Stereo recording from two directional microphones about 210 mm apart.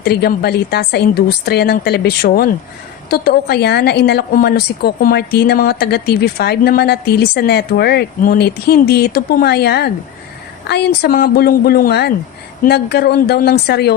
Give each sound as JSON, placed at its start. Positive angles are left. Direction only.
{"t": 0.0, "sound": "a woman's voice", "side_deg": 50}